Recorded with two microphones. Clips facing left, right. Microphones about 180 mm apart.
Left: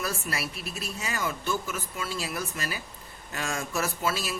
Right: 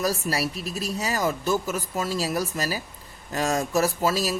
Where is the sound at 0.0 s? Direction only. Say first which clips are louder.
Right 7 dB; 35° right (ahead or behind).